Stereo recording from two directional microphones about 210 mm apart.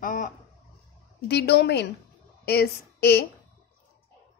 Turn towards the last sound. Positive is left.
turn(degrees=50)  # may be behind; listen again after turning